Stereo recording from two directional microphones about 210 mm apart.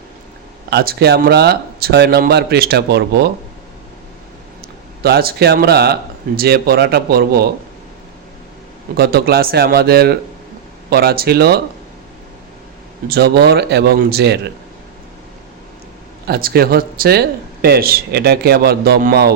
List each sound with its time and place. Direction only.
0.7 s speech: 50° right (ahead or behind)
5.0 s speech: 50° right (ahead or behind)
9.0 s speech: 45° right (ahead or behind)
13.1 s speech: 50° right (ahead or behind)
16.2 s speech: 50° right (ahead or behind)